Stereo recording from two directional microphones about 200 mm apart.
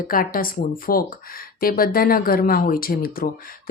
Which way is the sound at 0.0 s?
45° left (ahead or behind).